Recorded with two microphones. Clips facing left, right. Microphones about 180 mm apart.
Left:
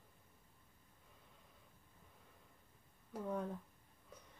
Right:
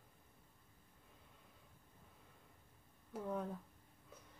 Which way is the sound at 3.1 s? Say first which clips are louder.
Left 1 dB; 5° right (ahead or behind).